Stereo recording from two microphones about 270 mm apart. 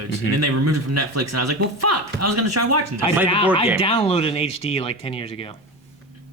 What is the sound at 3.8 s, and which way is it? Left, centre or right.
Speech, left.